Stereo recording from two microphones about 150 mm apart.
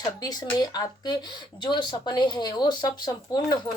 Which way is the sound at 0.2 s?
25° left (ahead or behind).